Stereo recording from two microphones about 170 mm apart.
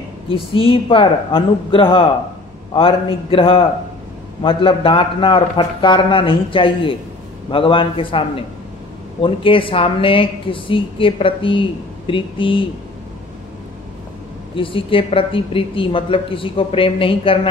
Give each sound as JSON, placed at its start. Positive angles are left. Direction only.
{"t": 0.3, "sound": "a woman's voice", "side_deg": 30}
{"t": 14.5, "sound": "a woman's voice", "side_deg": 30}